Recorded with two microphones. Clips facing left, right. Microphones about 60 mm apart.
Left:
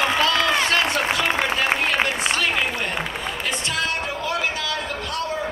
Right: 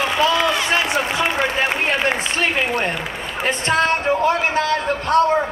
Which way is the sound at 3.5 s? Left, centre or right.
Right.